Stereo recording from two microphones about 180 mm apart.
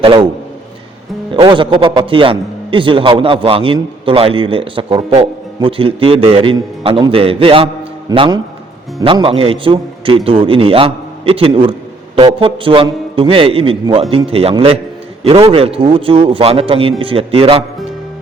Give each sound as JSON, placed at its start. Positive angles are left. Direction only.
{"t": 0.0, "sound": "a man's voice", "side_deg": -30}
{"t": 1.3, "sound": "a man's voice", "side_deg": -25}